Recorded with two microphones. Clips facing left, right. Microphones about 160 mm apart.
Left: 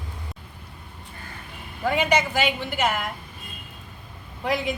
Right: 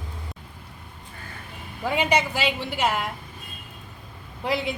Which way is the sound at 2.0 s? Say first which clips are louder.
Even; 30° right (ahead or behind).